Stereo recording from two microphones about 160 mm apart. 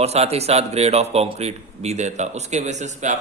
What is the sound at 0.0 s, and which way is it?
A man's voice, 40° right (ahead or behind).